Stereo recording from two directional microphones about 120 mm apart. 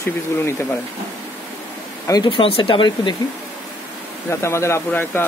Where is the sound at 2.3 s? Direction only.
50° left (ahead or behind).